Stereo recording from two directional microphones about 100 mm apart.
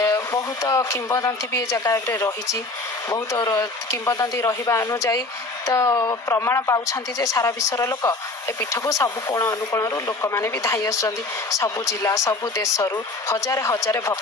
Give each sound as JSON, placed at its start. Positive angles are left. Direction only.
{"t": 0.0, "sound": "speech", "side_deg": 35}
{"t": 3.3, "sound": "speech", "side_deg": 35}
{"t": 5.7, "sound": "speech", "side_deg": 40}
{"t": 6.2, "sound": "speech", "side_deg": 30}